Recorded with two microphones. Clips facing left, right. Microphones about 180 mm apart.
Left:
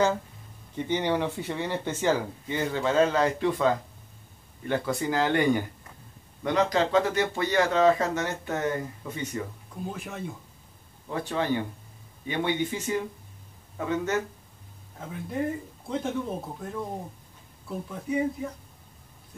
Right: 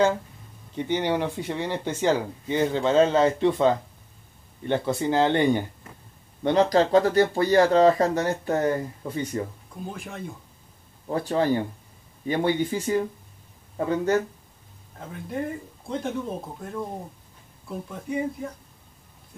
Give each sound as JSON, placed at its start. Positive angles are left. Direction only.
{"t": 0.7, "sound": "speech", "side_deg": -15}
{"t": 9.8, "sound": "speech", "side_deg": 5}
{"t": 11.1, "sound": "speech", "side_deg": -35}
{"t": 15.0, "sound": "speech", "side_deg": 0}